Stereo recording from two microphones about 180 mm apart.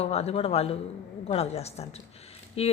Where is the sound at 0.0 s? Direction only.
35° left (ahead or behind).